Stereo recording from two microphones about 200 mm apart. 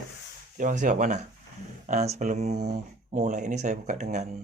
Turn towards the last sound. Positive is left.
turn(degrees=-35)  # may be behind; listen again after turning